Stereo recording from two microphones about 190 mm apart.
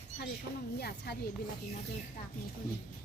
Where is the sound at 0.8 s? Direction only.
55° left (ahead or behind).